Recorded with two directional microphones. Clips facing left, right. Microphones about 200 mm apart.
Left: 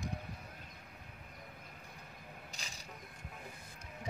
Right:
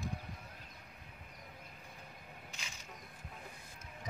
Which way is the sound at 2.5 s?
35° left (ahead or behind).